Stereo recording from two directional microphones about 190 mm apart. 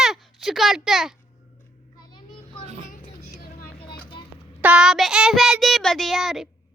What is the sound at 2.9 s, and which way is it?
Vehicle, 45° left (ahead or behind).